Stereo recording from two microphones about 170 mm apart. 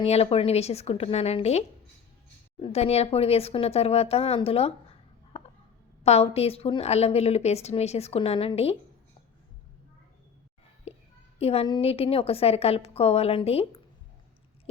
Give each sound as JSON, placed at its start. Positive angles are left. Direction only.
{"t": 0.0, "sound": "speech", "side_deg": 35}
{"t": 10.9, "sound": "a sound", "side_deg": 40}
{"t": 11.3, "sound": "speech", "side_deg": 35}